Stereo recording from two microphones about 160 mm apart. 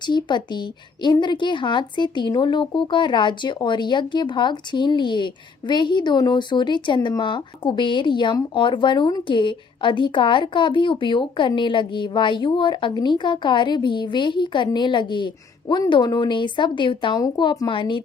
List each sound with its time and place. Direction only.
0.0 s speech: 25° left (ahead or behind)